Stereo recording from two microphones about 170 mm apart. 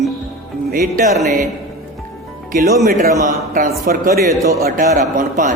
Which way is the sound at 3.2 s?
50° right (ahead or behind).